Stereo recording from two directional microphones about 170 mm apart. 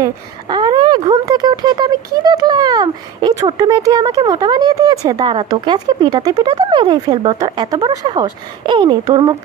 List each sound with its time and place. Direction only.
0.0 s speech: 25° right (ahead or behind)